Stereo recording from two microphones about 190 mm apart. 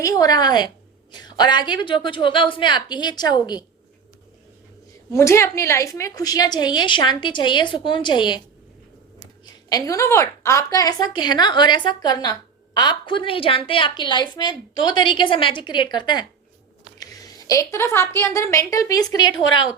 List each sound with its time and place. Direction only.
0.0 s a woman's voice: 20° left (ahead or behind)
5.1 s a woman's voice: 15° left (ahead or behind)
9.5 s a woman's voice: 20° left (ahead or behind)